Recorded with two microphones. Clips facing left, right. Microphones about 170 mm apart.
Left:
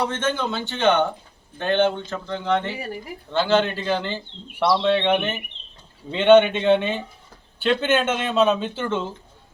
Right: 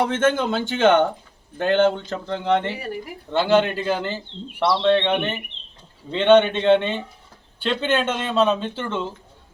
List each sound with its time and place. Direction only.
0.1 s speech: 50° right (ahead or behind)
1.8 s speech: 30° right (ahead or behind)
3.3 s a man's voice: 10° right (ahead or behind)
4.6 s speech: 10° left (ahead or behind)